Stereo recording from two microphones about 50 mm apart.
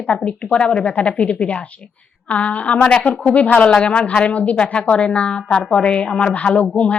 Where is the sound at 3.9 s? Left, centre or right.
Left.